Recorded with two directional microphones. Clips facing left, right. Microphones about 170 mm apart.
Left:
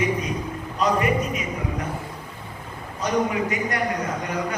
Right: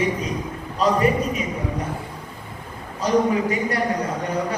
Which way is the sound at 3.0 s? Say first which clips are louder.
Right 4 dB; 35° right (ahead or behind).